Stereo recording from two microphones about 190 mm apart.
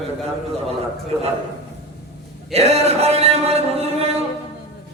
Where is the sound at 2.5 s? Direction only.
35° right (ahead or behind).